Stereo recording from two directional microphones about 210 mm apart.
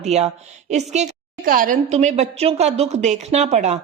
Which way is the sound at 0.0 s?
30° right (ahead or behind).